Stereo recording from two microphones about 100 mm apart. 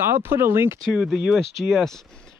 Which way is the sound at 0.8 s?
Centre (ahead or behind).